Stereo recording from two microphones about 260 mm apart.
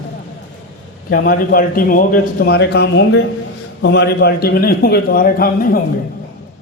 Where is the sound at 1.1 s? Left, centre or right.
Left.